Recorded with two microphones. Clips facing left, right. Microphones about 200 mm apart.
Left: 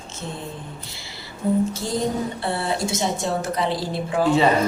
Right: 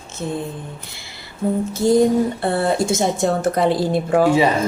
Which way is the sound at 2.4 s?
50° right (ahead or behind).